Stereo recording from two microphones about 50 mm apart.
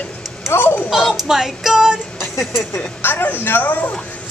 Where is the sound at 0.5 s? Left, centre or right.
Left.